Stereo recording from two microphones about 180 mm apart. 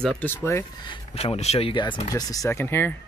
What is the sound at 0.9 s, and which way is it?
Speech, 30° left (ahead or behind).